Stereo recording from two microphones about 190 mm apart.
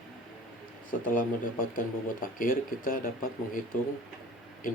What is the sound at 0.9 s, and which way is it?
Speech, 45° left (ahead or behind).